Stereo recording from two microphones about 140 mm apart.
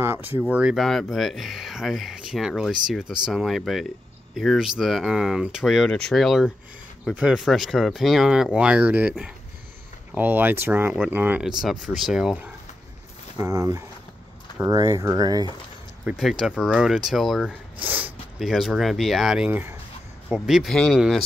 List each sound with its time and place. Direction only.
0.0 s a sound: 15° right (ahead or behind)
0.4 s speech: 10° right (ahead or behind)
13.4 s speech: 25° right (ahead or behind)
16.1 s speech: centre (ahead or behind)
17.8 s speech: 10° right (ahead or behind)
18.4 s speech: centre (ahead or behind)